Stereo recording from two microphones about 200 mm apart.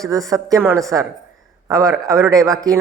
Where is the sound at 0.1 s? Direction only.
15° right (ahead or behind).